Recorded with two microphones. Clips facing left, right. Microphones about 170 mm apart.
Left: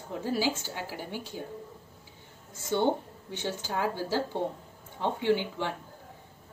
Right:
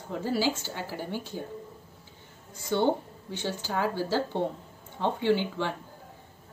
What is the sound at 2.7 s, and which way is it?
Speech, 15° left (ahead or behind).